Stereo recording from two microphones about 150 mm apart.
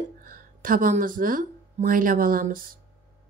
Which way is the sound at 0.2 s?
65° right (ahead or behind).